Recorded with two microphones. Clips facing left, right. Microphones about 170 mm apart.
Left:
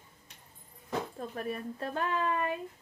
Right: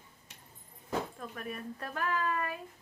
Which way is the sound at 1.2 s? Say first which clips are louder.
Left 5 dB; 30° left (ahead or behind).